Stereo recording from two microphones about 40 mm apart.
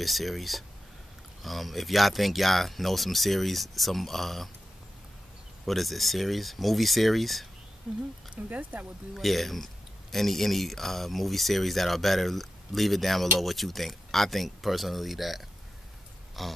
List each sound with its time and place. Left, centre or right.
0.0 s speech: centre
5.7 s speech: centre
7.9 s speech: centre
8.4 s speech: right
9.1 s speech: centre